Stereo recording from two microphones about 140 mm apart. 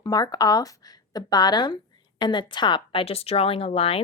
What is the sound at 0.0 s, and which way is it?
Speech, 30° left (ahead or behind).